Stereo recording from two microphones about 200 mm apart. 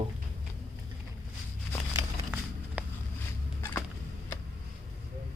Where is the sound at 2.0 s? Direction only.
10° right (ahead or behind).